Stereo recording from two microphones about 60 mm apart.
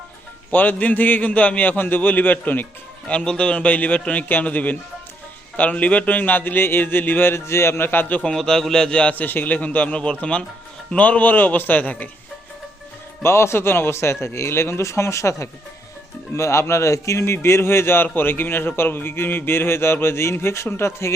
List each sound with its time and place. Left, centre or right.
0.5 s a man's voice: left
3.1 s a man's voice: centre; by 8.2 s left
8.2 s a man's voice: centre
9.1 s a man's voice: left
13.2 s a man's voice: left